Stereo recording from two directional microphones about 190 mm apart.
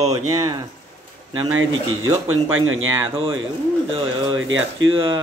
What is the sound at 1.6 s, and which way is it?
Speech, 90° right.